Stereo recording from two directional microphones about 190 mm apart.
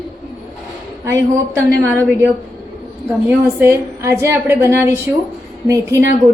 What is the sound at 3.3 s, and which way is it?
A woman's voice, 15° right (ahead or behind).